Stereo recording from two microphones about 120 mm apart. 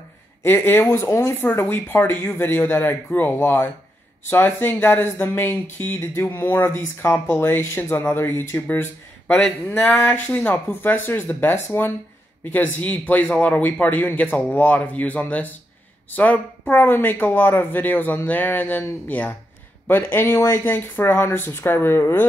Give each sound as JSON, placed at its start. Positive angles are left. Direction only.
{"t": 0.4, "sound": "speech", "side_deg": 20}